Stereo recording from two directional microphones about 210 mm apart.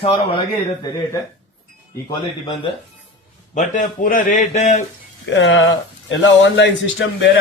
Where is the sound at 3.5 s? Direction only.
35° left (ahead or behind).